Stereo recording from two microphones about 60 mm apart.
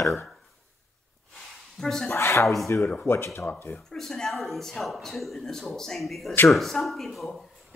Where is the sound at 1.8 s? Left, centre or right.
Centre.